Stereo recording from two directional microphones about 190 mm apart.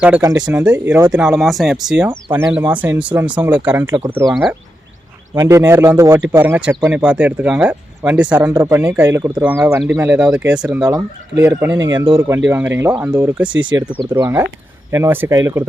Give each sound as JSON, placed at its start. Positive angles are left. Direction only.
{"t": 0.4, "sound": "speech", "side_deg": -5}
{"t": 4.3, "sound": "speech", "side_deg": 0}
{"t": 5.3, "sound": "speech", "side_deg": -15}
{"t": 8.4, "sound": "speech", "side_deg": -20}
{"t": 11.9, "sound": "speech", "side_deg": -25}
{"t": 13.5, "sound": "speech", "side_deg": -85}
{"t": 14.1, "sound": "speech", "side_deg": -20}